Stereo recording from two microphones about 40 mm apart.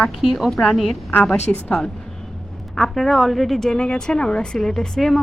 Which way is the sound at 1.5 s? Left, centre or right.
Left.